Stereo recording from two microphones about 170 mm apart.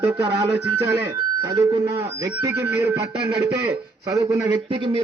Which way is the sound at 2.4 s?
15° right (ahead or behind).